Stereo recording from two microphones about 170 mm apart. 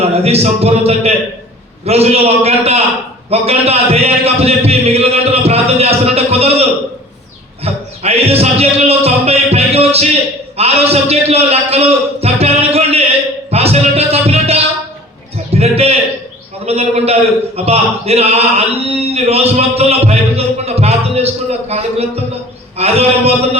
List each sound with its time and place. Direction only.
0.0 s a man's voice: 35° right (ahead or behind)
7.6 s music: 35° right (ahead or behind)
10.6 s a sound: 35° right (ahead or behind)
13.5 s music: 35° right (ahead or behind)
15.5 s a sound: 40° right (ahead or behind)
16.6 s a man's voice: 35° right (ahead or behind)